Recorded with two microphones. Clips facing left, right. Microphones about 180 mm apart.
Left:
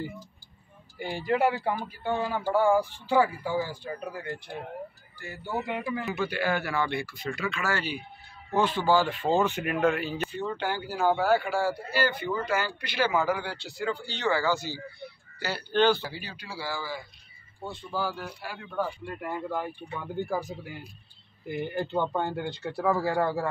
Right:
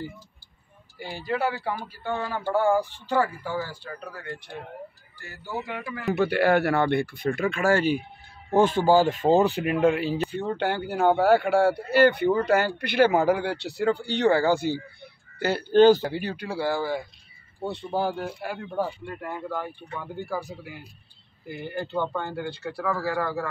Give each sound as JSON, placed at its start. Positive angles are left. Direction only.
{"t": 0.9, "sound": "speech", "side_deg": 15}
{"t": 6.1, "sound": "a man's voice", "side_deg": -65}
{"t": 10.4, "sound": "speech", "side_deg": -55}
{"t": 18.7, "sound": "speech", "side_deg": -25}
{"t": 19.2, "sound": "speech", "side_deg": 10}
{"t": 21.7, "sound": "speech", "side_deg": 20}